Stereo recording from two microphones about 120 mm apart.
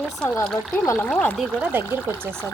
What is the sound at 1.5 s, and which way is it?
Speech, 20° right (ahead or behind).